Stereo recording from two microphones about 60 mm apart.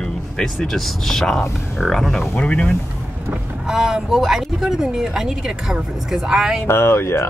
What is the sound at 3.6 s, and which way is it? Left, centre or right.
Speech, centre.